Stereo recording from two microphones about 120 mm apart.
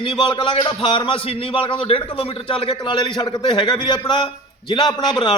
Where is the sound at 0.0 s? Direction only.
40° left (ahead or behind).